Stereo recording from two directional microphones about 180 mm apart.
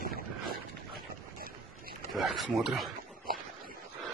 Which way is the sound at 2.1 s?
Centre (ahead or behind).